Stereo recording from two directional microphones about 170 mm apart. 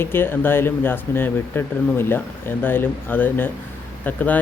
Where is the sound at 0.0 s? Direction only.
15° left (ahead or behind).